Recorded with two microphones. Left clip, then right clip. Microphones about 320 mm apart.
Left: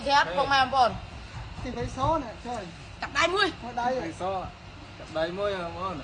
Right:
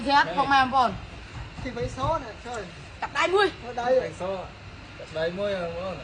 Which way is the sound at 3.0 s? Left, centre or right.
Centre.